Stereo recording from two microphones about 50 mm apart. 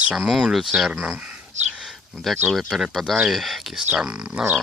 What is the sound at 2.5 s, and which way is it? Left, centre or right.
Speech, centre.